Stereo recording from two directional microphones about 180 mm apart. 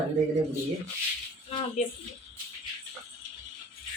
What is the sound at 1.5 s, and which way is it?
Speech, 35° left (ahead or behind).